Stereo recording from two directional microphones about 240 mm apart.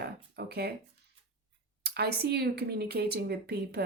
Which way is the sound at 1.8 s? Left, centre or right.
Right.